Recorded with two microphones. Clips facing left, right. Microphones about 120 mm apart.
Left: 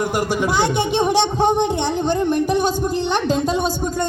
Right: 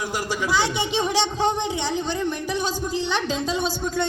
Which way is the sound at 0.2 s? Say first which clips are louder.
Left 3 dB; 55° left (ahead or behind).